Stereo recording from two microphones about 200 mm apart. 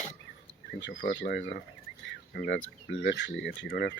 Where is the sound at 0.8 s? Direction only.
60° left (ahead or behind).